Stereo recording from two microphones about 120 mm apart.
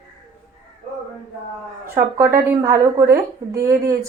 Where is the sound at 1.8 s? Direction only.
20° right (ahead or behind).